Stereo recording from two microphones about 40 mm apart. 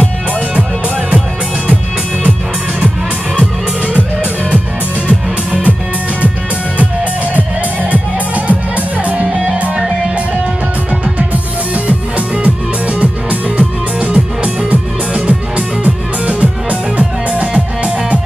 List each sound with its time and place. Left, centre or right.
3.8 s music: right
7.9 s music: right
12.4 s music: right